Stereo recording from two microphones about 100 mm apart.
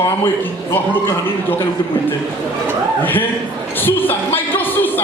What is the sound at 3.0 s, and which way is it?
Music, 20° left (ahead or behind).